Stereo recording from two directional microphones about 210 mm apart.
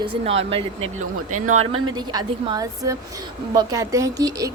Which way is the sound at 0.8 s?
90° right.